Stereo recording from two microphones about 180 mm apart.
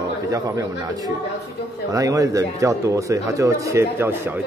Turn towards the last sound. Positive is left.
turn(degrees=-10)  # may be behind; listen again after turning